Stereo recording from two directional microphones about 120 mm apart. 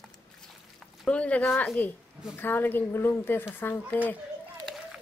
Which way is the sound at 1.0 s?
10° left (ahead or behind).